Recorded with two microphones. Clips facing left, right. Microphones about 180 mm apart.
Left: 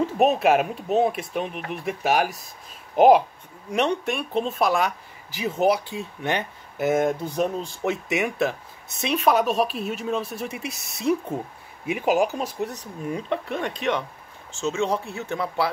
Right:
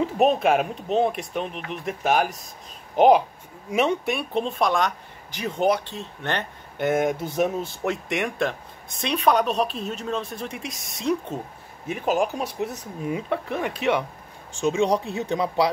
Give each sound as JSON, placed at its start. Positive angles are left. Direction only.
{"t": 0.0, "sound": "speech", "side_deg": 5}
{"t": 7.0, "sound": "speech", "side_deg": -5}
{"t": 12.4, "sound": "speech", "side_deg": -5}